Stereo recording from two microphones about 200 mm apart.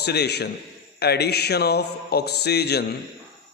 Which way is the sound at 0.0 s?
55° left (ahead or behind).